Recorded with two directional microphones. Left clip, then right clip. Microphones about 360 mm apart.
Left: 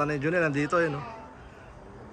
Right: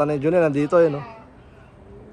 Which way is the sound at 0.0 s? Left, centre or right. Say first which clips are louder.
Right 7 dB; centre.